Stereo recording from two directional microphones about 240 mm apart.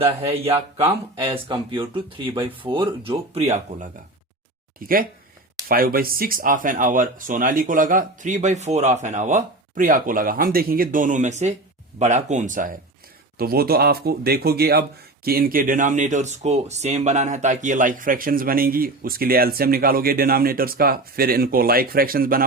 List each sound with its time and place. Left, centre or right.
0.0 s speech: right
4.8 s speech: right